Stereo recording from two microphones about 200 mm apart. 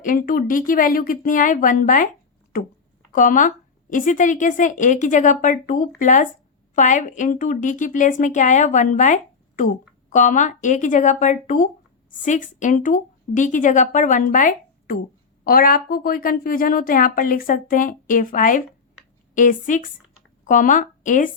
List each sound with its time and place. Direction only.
0.0 s speech: 45° left (ahead or behind)
3.1 s speech: 40° left (ahead or behind)